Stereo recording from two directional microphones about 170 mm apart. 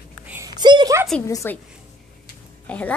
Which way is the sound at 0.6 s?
25° right (ahead or behind).